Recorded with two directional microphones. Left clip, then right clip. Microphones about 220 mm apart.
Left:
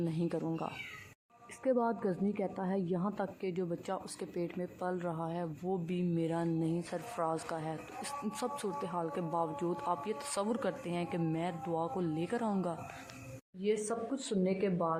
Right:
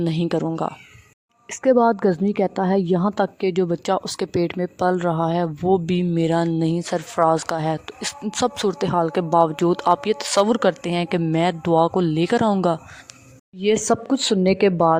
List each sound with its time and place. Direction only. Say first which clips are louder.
0.0 s speech: right 14 dB; 40° right (ahead or behind)